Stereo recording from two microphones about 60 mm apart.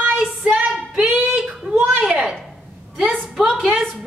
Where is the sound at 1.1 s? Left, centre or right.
Centre.